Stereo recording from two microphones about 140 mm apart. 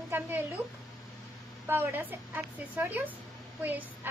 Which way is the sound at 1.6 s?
15° right (ahead or behind).